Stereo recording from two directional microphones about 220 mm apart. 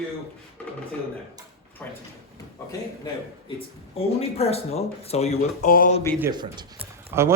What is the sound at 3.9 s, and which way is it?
Speech, 30° left (ahead or behind).